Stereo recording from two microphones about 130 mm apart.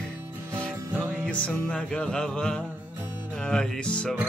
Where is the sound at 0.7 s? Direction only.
20° right (ahead or behind).